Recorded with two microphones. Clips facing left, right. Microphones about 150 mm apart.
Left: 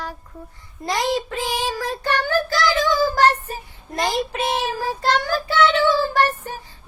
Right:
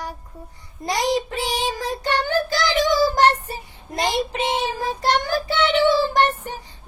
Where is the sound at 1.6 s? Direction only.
15° right (ahead or behind).